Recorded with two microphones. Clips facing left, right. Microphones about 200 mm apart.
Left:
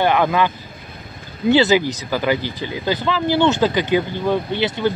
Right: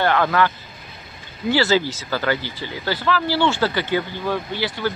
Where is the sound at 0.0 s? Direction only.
15° left (ahead or behind).